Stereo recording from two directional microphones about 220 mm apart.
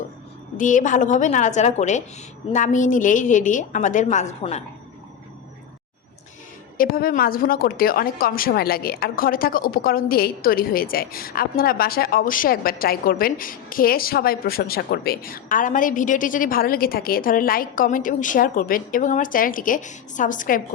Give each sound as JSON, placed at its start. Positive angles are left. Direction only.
{"t": 0.5, "sound": "a woman's voice", "side_deg": 35}
{"t": 6.7, "sound": "a woman's voice", "side_deg": 40}